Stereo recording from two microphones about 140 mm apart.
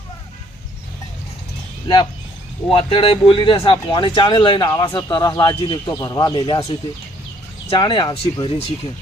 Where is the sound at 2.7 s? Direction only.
40° left (ahead or behind).